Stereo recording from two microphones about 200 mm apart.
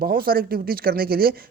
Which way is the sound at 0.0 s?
45° right (ahead or behind).